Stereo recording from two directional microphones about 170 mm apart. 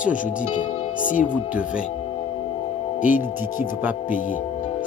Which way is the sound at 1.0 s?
50° left (ahead or behind).